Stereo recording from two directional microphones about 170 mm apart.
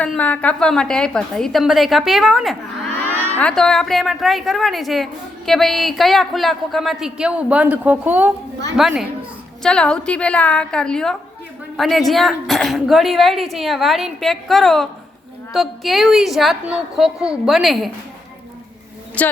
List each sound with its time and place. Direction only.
0.0 s a woman's voice: 10° left (ahead or behind)
19.2 s speech: 10° left (ahead or behind)